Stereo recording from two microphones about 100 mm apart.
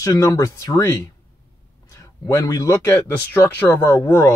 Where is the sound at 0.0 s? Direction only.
30° left (ahead or behind).